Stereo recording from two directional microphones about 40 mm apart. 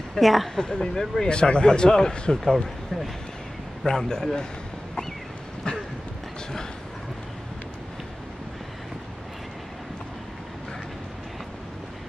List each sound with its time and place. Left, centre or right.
0.1 s speech: centre
0.6 s speech: centre
3.8 s speech: centre